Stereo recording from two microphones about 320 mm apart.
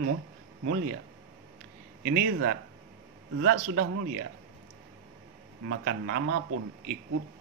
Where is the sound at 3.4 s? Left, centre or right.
Right.